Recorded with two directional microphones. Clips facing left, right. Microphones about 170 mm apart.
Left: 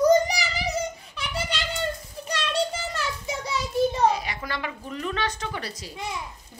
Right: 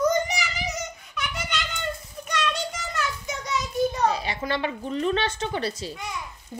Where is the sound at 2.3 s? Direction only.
30° left (ahead or behind).